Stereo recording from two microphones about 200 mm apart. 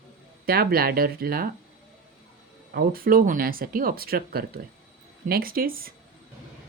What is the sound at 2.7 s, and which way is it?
Speech, 45° right (ahead or behind).